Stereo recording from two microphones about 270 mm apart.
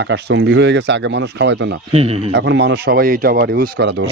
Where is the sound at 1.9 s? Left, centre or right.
Right.